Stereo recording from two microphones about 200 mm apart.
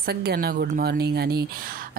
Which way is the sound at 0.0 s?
55° right (ahead or behind).